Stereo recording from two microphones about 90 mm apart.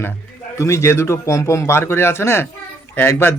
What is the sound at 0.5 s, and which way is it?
A man's voice, 30° left (ahead or behind).